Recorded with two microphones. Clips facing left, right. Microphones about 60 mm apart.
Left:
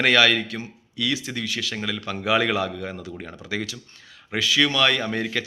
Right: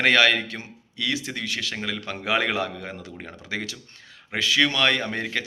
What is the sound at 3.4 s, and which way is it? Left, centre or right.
A man's voice, right.